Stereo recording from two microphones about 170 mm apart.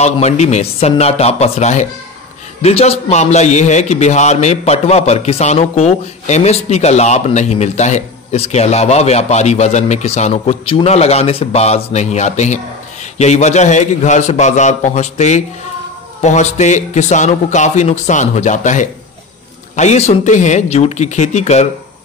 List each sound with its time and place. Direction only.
0.0 s a man's voice: 40° left (ahead or behind)